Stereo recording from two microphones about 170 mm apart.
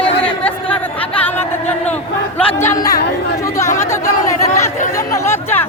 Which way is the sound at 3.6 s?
15° left (ahead or behind).